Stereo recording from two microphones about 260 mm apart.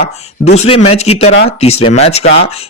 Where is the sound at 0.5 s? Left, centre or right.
Left.